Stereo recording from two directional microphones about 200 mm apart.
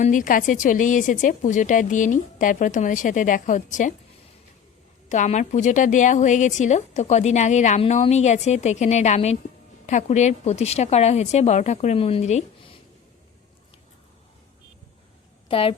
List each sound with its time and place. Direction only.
0.0 s a woman's voice: 40° left (ahead or behind)
5.0 s a woman's voice: 35° left (ahead or behind)
15.4 s a woman's voice: 25° left (ahead or behind)